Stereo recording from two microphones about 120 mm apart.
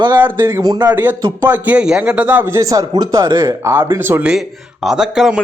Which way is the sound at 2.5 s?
30° right (ahead or behind).